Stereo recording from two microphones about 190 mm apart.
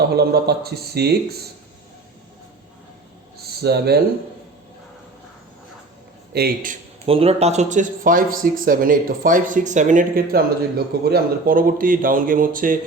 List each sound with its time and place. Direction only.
0.1 s speech: 60° right (ahead or behind)
3.3 s a sound: 60° right (ahead or behind)
6.3 s speech: 50° right (ahead or behind)
7.0 s speech: 30° right (ahead or behind); by 12.8 s 45° right (ahead or behind)